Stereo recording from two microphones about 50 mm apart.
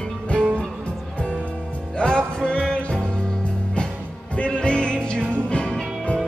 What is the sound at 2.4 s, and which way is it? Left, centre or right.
Music, centre.